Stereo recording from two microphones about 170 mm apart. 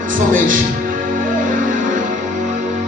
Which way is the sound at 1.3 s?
50° right (ahead or behind).